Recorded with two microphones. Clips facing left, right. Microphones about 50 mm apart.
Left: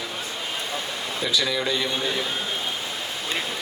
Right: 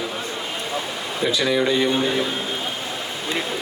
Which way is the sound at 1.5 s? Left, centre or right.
Right.